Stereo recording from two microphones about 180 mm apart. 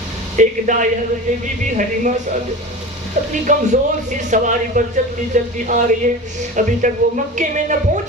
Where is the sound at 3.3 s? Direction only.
45° right (ahead or behind).